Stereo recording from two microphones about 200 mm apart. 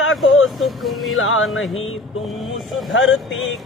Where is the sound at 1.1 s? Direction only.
85° left.